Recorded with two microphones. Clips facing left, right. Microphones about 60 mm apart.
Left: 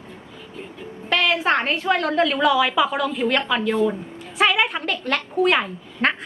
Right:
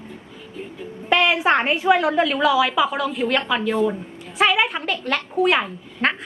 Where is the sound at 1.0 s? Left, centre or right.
Centre.